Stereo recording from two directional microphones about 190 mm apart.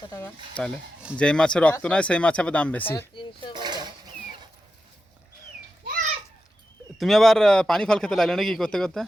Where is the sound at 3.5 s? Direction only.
25° right (ahead or behind).